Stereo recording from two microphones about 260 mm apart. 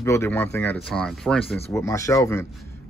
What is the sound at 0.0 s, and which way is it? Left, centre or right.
Speech, centre.